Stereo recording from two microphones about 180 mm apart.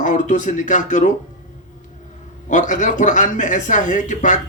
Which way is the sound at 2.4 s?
45° left (ahead or behind).